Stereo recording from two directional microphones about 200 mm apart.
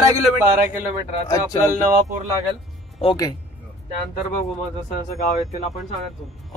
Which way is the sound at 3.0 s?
20° left (ahead or behind).